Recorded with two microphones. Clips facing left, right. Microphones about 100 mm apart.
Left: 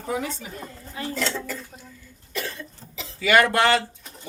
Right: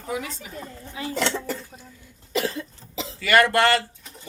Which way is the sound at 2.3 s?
90° right.